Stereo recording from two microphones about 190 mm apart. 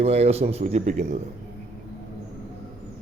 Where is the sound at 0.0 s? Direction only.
35° right (ahead or behind).